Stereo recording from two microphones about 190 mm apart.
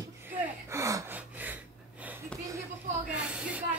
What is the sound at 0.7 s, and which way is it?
Gasp, 15° right (ahead or behind).